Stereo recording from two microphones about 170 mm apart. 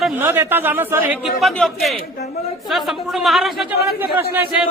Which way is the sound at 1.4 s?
Centre (ahead or behind).